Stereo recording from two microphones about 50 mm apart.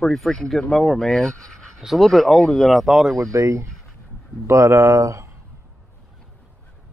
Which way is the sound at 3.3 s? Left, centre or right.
Right.